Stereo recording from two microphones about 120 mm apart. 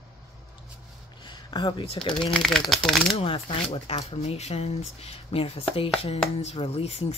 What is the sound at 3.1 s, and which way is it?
Speech, 50° left (ahead or behind).